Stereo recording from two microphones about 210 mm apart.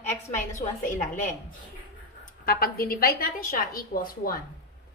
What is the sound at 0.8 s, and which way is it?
Speech, 35° left (ahead or behind).